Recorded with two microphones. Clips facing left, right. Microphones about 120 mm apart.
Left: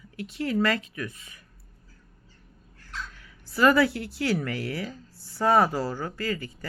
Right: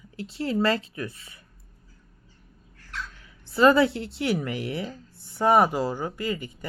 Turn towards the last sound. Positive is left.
turn(degrees=-20)  # may be behind; listen again after turning